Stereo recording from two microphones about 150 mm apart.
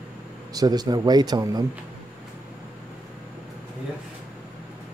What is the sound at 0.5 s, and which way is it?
Speech, 25° right (ahead or behind).